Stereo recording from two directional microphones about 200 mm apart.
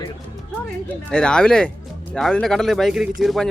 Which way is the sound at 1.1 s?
5° left (ahead or behind).